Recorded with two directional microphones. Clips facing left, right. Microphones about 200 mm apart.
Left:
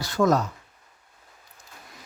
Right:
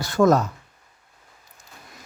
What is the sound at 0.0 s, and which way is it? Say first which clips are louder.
Speech: right 4 dB; 50° right (ahead or behind).